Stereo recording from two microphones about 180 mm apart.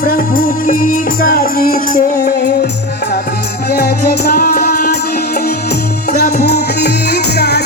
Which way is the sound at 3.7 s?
60° left (ahead or behind).